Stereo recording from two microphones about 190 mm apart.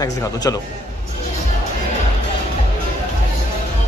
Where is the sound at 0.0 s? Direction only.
20° left (ahead or behind).